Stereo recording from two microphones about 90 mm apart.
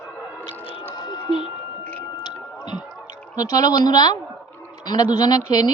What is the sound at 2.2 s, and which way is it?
Whale vocalization, 55° left (ahead or behind).